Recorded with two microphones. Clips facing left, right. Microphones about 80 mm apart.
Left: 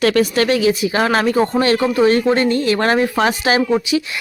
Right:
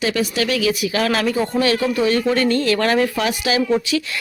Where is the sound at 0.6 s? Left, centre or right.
Left.